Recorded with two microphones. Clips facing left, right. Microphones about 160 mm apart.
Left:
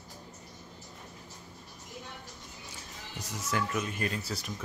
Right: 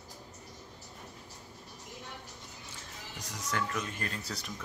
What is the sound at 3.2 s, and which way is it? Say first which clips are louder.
Speech: left 2 dB; 5° left (ahead or behind).